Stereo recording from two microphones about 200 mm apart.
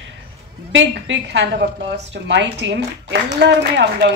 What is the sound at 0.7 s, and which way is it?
A woman's voice, 65° right (ahead or behind).